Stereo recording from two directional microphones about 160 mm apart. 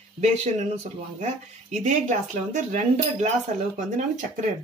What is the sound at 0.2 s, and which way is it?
Speech, 45° right (ahead or behind).